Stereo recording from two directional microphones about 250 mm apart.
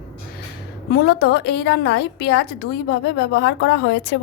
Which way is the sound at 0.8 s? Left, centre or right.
Left.